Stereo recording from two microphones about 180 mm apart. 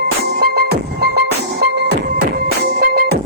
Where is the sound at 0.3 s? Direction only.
60° right (ahead or behind).